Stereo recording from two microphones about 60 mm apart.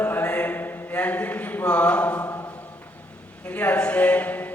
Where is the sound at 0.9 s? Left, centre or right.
Left.